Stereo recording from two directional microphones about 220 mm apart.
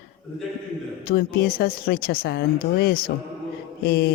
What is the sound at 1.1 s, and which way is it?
Speech, 45° left (ahead or behind).